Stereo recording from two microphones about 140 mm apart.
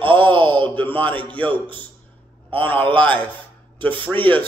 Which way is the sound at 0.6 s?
10° left (ahead or behind).